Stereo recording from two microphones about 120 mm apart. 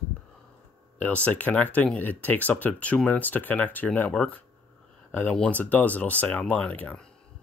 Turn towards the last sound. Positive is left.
turn(degrees=15)  # may be behind; listen again after turning